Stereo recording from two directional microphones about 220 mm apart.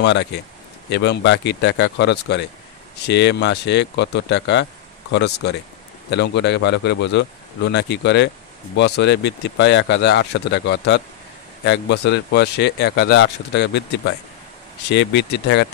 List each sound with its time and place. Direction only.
0.0 s speech: 55° left (ahead or behind)